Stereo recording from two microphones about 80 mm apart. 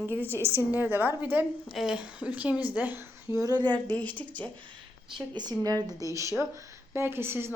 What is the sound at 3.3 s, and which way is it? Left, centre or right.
Speech, left.